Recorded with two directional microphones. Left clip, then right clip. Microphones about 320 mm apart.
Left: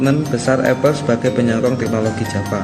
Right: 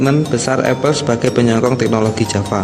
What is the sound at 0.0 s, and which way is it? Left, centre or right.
Speech, right.